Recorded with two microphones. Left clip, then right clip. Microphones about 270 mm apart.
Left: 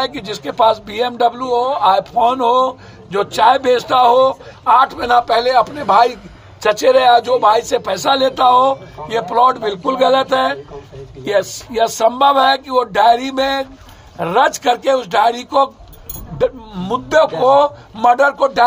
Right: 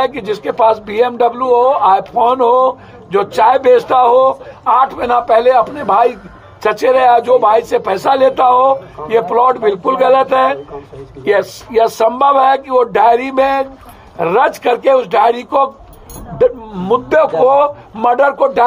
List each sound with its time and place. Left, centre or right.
0.0 s a man's voice: centre